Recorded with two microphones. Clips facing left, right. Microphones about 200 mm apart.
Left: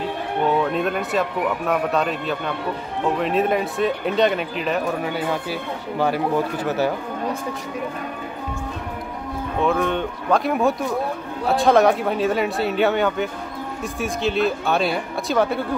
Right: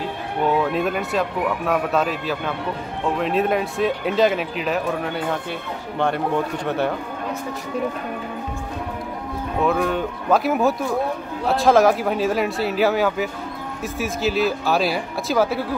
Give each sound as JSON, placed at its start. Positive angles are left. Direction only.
{"t": 0.6, "sound": "speech", "side_deg": 0}
{"t": 9.6, "sound": "speech", "side_deg": 0}